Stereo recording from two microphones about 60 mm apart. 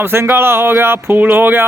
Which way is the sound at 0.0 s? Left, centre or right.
Right.